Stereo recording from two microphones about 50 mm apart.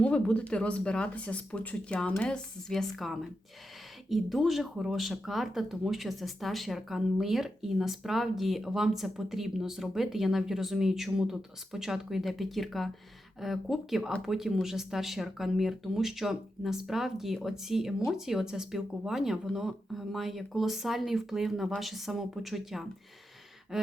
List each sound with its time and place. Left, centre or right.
0.0 s speech: left
2.2 s speech: centre
2.7 s speech: centre
23.7 s a sound: centre